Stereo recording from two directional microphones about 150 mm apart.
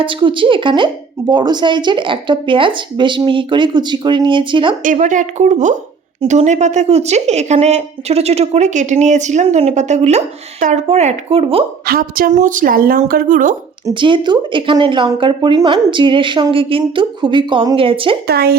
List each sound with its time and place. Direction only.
0.0 s speech: 35° right (ahead or behind)
4.8 s a woman's voice: 60° right (ahead or behind); by 11.6 s 40° right (ahead or behind)
11.9 s speech: 75° right (ahead or behind)
13.8 s speech: 30° right (ahead or behind)
18.3 s speech: 90° right